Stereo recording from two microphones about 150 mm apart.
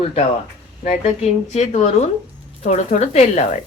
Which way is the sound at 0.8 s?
50° left (ahead or behind).